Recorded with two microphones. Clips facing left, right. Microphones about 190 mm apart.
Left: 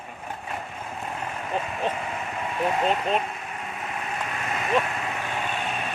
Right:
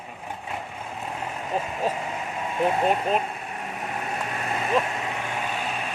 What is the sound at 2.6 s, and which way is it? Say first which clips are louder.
Speech: right 2 dB; 15° right (ahead or behind).